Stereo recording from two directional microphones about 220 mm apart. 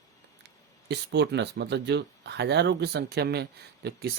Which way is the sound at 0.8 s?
50° right (ahead or behind).